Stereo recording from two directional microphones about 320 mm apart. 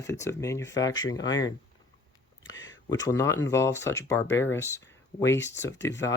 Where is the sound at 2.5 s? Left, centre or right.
Left.